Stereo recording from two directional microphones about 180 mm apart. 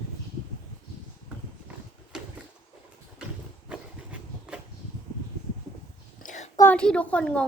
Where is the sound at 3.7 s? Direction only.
5° right (ahead or behind).